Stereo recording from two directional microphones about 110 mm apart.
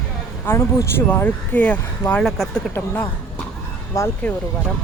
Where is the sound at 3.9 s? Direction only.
30° left (ahead or behind).